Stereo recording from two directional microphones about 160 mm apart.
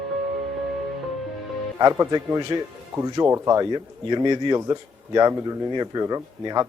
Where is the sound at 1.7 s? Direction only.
20° right (ahead or behind).